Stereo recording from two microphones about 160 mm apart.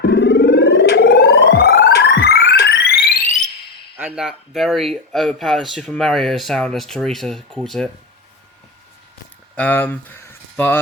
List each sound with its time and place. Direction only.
0.0 s music: 90° left; by 3.5 s 50° left (ahead or behind)
3.9 s speech: 5° right (ahead or behind)
9.6 s speech: 10° left (ahead or behind)